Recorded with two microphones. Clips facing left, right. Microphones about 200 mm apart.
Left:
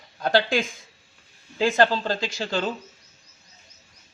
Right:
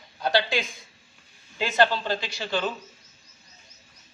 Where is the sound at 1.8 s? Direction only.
45° left (ahead or behind).